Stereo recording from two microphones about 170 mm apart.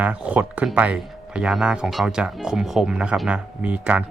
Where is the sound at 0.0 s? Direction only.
10° right (ahead or behind).